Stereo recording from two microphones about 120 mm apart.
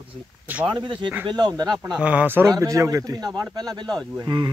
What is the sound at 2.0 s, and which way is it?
Speech, 10° right (ahead or behind).